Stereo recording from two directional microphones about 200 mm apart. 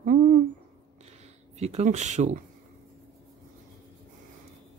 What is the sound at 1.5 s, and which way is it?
Speech, 35° right (ahead or behind).